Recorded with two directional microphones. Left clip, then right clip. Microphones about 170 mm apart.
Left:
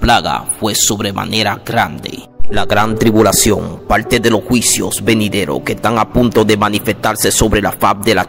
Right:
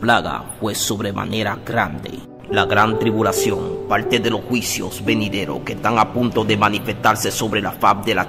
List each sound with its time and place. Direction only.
0.0 s speech: 40° left (ahead or behind)